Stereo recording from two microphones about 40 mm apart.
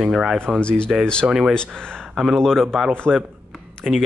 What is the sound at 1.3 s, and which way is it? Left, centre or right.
Speech, centre.